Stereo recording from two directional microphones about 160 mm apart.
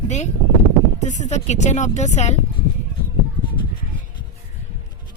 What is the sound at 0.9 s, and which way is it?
Speech, 45° left (ahead or behind).